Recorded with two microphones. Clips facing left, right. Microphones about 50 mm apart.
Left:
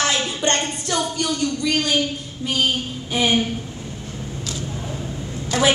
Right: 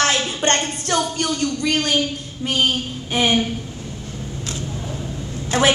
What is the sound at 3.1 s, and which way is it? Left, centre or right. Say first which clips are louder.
Speech: right 1 dB; right.